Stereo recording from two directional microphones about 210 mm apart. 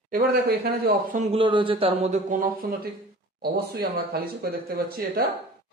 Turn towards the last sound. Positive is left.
turn(degrees=-45)  # may be behind; listen again after turning